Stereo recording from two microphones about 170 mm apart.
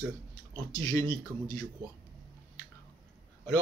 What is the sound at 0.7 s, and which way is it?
Speech, 20° left (ahead or behind).